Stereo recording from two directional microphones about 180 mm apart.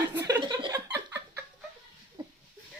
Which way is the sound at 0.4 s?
20° right (ahead or behind).